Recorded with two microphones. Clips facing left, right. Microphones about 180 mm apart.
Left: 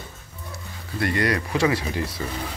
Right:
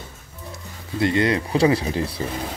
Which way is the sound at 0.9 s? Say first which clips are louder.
Right 4 dB; 20° right (ahead or behind).